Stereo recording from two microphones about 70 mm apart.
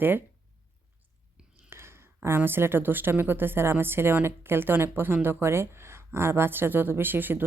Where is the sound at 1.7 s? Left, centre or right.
Right.